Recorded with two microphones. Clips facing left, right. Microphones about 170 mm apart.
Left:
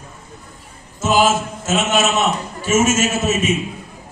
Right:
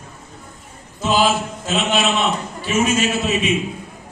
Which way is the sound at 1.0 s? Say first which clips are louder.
Left 2 dB; 45° left (ahead or behind).